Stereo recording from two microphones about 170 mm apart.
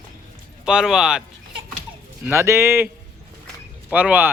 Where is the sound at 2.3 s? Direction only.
15° right (ahead or behind).